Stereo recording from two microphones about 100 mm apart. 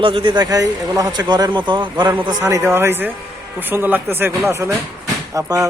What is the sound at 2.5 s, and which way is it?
Speech, 25° right (ahead or behind).